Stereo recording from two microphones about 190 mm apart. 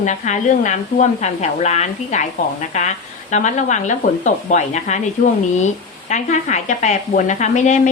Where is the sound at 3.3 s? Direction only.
40° left (ahead or behind).